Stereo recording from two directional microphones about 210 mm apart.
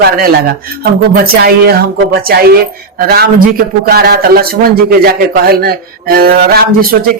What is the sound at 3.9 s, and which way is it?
A man's voice, 45° right (ahead or behind).